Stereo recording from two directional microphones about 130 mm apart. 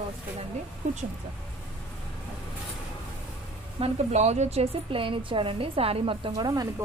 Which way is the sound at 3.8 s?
60° right (ahead or behind).